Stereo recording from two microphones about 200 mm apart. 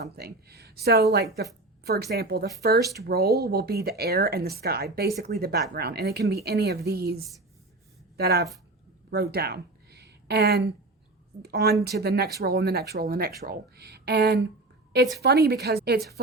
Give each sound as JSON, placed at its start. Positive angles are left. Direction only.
{"t": 0.0, "sound": "speech", "side_deg": -50}
{"t": 9.0, "sound": "a sound", "side_deg": -50}
{"t": 11.4, "sound": "a woman's voice", "side_deg": -50}